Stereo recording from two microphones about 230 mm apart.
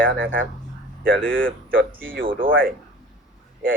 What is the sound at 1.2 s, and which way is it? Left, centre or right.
Speech, right.